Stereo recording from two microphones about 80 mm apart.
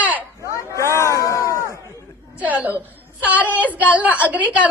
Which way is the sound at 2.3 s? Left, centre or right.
Right.